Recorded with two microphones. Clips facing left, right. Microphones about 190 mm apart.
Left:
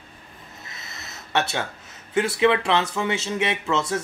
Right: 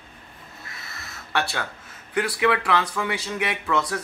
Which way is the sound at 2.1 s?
25° left (ahead or behind).